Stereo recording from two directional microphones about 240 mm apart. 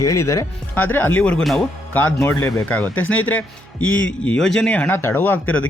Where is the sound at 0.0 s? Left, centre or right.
Centre.